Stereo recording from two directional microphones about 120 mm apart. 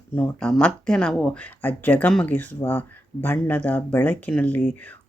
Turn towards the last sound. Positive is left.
turn(degrees=15)  # may be behind; listen again after turning